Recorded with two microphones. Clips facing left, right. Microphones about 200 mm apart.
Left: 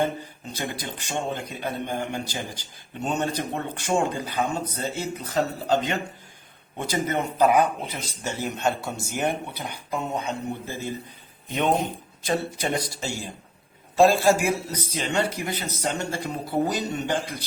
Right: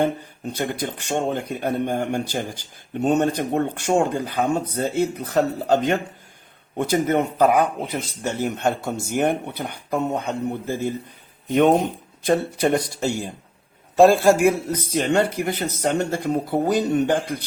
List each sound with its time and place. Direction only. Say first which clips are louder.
0.0 s speech: right 4 dB; 55° right (ahead or behind)
12.2 s speech: right 7 dB; 55° right (ahead or behind)